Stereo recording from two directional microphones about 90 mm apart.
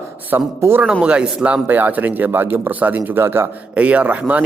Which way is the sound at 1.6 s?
20° right (ahead or behind).